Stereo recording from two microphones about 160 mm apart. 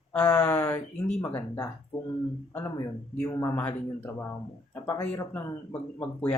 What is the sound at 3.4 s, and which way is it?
Speech, 20° left (ahead or behind).